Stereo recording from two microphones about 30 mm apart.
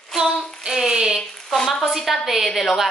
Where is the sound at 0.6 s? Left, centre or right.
Centre.